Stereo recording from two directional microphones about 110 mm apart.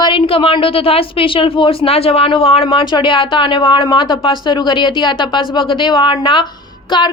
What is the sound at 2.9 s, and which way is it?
A woman's voice, 45° left (ahead or behind).